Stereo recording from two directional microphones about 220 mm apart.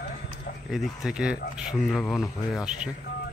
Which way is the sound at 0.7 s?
Centre (ahead or behind).